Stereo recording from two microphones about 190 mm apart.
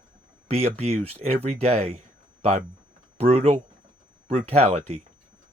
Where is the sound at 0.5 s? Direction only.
35° right (ahead or behind).